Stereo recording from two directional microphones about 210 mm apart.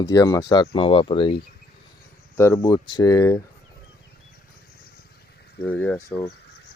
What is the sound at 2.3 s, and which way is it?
Speech, 10° left (ahead or behind).